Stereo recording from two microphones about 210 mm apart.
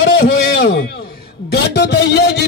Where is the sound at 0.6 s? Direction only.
55° left (ahead or behind).